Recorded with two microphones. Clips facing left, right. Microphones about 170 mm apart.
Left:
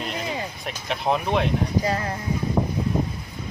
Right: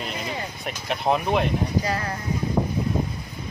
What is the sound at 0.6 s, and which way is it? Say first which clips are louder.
Speech: right 3 dB; centre (ahead or behind).